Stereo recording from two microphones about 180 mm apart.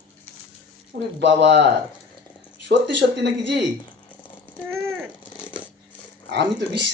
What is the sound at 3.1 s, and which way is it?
Speech, 70° right (ahead or behind).